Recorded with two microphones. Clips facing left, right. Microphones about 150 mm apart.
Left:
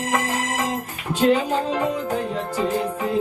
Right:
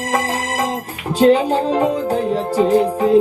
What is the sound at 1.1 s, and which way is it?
Music, 35° right (ahead or behind).